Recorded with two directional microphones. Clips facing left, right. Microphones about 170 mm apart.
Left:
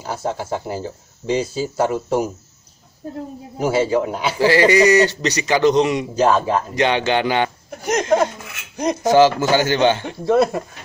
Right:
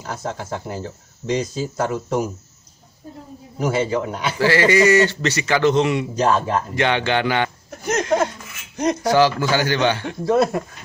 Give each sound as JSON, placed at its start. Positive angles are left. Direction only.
{"t": 0.0, "sound": "speech", "side_deg": 5}
{"t": 3.5, "sound": "speech", "side_deg": 5}
{"t": 4.4, "sound": "speech", "side_deg": 15}
{"t": 6.2, "sound": "speech", "side_deg": 5}
{"t": 6.7, "sound": "speech", "side_deg": 20}
{"t": 10.2, "sound": "speech", "side_deg": 0}